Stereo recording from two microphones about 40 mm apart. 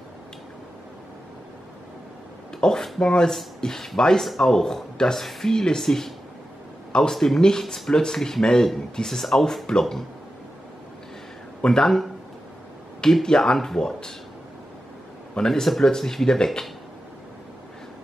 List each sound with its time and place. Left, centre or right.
2.6 s speech: centre
4.2 s speech: centre
7.9 s speech: centre
11.8 s speech: centre
13.2 s speech: centre
15.3 s speech: centre
15.6 s speech: centre